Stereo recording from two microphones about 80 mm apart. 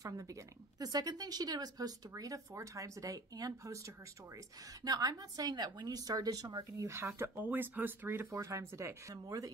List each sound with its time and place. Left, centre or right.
0.0 s a woman's voice: right
4.8 s a woman's voice: right
6.9 s speech: right
8.3 s speech: right